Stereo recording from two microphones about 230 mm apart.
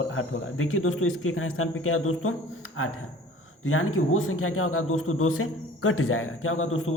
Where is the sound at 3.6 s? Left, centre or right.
Left.